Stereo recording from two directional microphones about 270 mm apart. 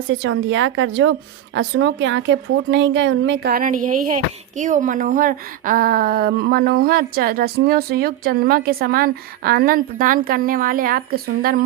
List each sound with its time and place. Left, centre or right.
0.1 s a woman's voice: right